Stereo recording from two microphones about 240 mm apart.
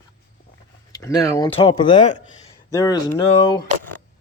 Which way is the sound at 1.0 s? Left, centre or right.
Centre.